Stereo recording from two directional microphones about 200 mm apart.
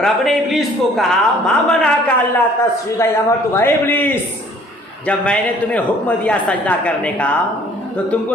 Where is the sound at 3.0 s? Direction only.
10° left (ahead or behind).